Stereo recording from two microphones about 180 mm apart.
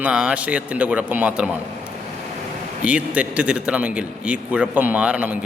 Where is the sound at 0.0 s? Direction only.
5° right (ahead or behind).